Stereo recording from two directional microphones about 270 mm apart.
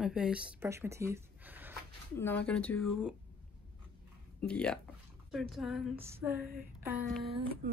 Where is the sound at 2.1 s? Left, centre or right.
Centre.